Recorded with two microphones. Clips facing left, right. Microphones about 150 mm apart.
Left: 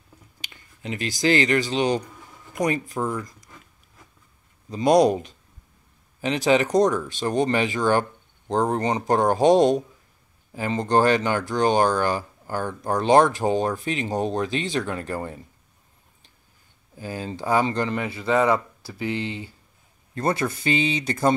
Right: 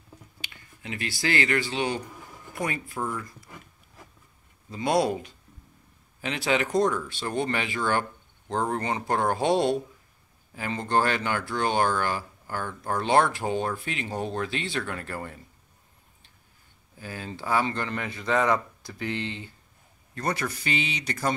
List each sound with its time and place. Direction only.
0.5 s finger snapping: 25° left (ahead or behind)
1.2 s speech: 20° left (ahead or behind)
2.1 s a sound: 5° right (ahead or behind)
2.5 s speech: 20° left (ahead or behind)
4.8 s speech: 20° left (ahead or behind)
6.2 s speech: 20° left (ahead or behind)
12.1 s a sound: 40° left (ahead or behind)
12.8 s speech: 20° left (ahead or behind)
17.0 s speech: 20° left (ahead or behind)
20.2 s speech: 25° left (ahead or behind)